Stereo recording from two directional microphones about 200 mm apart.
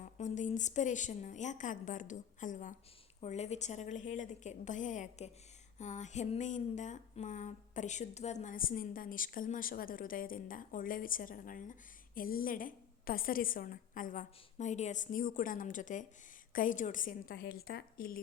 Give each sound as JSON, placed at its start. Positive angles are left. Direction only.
{"t": 0.0, "sound": "a woman's voice", "side_deg": 40}
{"t": 17.3, "sound": "speech", "side_deg": 55}